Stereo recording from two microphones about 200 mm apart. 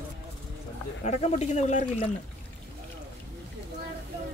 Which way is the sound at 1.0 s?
35° left (ahead or behind).